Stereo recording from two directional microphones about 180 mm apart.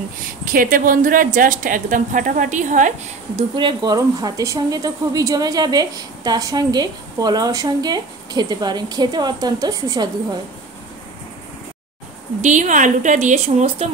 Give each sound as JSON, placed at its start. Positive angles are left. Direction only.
{"t": 0.5, "sound": "speech", "side_deg": -50}
{"t": 3.3, "sound": "a woman's voice", "side_deg": -25}
{"t": 12.4, "sound": "speech", "side_deg": -45}